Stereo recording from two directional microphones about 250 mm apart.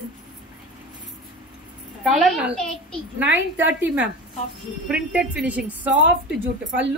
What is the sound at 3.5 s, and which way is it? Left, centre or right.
A woman's voice, centre.